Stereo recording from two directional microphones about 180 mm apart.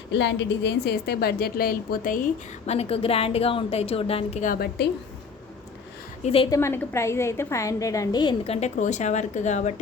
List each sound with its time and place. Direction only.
0.1 s a woman's voice: 75° left (ahead or behind); by 2.2 s 50° left (ahead or behind)
2.6 s a woman's voice: 35° left (ahead or behind); by 4.9 s 55° left (ahead or behind)
6.2 s a woman's voice: 30° left (ahead or behind)
6.5 s a woman's voice: 15° left (ahead or behind)
8.6 s a woman's voice: 40° left (ahead or behind)